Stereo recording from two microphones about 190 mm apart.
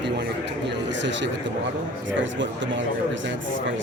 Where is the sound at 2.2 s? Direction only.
75° right (ahead or behind).